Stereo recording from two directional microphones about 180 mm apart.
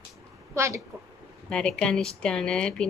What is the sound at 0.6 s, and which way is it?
Speech, 15° right (ahead or behind).